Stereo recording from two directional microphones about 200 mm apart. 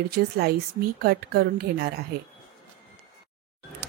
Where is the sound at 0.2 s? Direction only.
55° right (ahead or behind).